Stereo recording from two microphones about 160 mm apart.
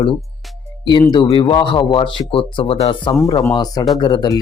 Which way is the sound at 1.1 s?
30° left (ahead or behind).